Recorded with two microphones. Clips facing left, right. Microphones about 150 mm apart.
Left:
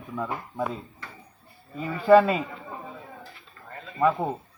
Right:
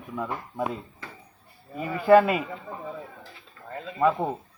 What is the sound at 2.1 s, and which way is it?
Speech, 5° right (ahead or behind).